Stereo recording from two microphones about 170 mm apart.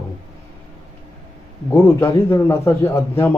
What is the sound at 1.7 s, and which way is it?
Speech, 15° left (ahead or behind).